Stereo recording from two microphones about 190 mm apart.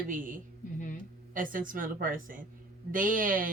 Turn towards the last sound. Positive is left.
turn(degrees=-45)  # may be behind; listen again after turning